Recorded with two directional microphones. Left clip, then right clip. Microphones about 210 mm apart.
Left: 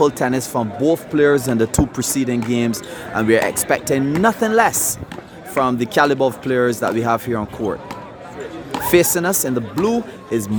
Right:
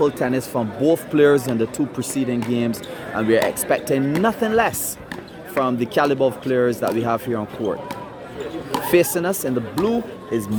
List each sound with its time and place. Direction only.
0.0 s speech: 20° left (ahead or behind)
1.5 s speech: 25° left (ahead or behind)
8.9 s speech: 20° left (ahead or behind)